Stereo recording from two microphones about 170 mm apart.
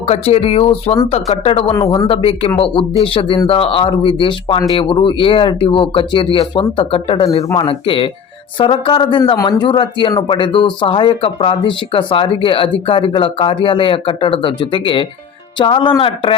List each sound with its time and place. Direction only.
0.1 s speech: 35° left (ahead or behind)